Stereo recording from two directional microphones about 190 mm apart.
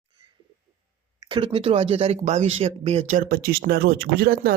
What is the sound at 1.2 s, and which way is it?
Speech, 25° right (ahead or behind).